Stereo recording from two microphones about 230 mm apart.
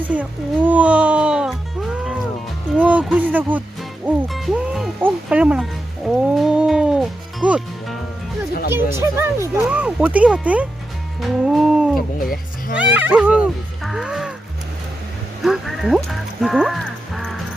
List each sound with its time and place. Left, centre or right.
0.1 s music: centre
8.7 s speech: centre
11.2 s a sound: centre
11.9 s a sound: left
12.7 s speech: centre
13.8 s music: centre
15.4 s frog: centre
16.0 s music: centre